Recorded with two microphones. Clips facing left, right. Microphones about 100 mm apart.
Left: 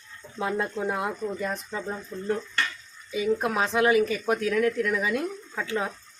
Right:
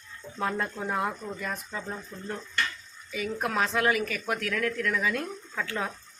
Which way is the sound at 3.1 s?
20° left (ahead or behind).